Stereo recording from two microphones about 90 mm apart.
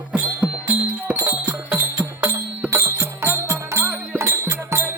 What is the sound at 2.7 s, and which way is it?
Music, 30° right (ahead or behind).